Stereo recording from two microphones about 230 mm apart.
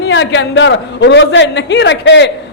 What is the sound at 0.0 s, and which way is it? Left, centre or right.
A man's voice, left.